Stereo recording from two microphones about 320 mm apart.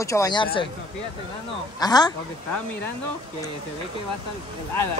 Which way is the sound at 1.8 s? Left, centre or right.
Centre.